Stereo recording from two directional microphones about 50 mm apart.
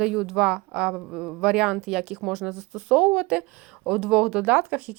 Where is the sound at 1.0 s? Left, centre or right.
Centre.